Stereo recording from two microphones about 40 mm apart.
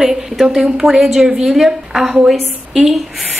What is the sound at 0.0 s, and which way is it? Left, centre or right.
A woman's voice, centre.